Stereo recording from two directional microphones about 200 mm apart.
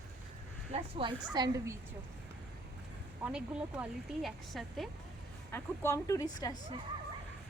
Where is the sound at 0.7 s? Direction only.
25° right (ahead or behind).